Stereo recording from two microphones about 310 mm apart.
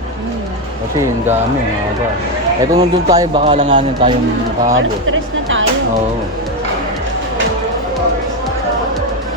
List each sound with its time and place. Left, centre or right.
2.7 s speech: centre
4.7 s music: right